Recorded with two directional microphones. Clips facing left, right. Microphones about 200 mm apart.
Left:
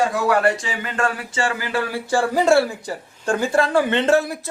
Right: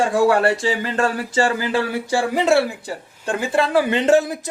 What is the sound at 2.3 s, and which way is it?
Speech, centre (ahead or behind).